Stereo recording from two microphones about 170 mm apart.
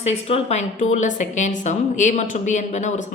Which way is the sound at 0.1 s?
35° left (ahead or behind).